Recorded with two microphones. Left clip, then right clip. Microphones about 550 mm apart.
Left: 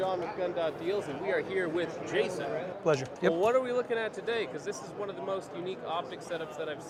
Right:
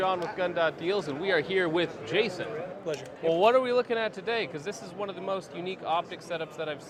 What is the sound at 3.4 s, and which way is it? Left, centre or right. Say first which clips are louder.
Speech: right 8 dB; right.